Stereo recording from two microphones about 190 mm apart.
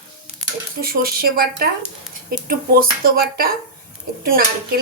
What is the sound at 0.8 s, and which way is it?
Speech, 50° right (ahead or behind).